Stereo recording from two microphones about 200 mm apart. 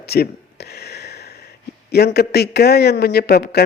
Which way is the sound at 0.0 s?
55° left (ahead or behind).